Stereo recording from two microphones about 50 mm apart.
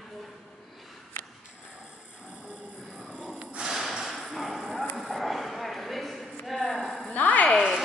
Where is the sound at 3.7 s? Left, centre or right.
Centre.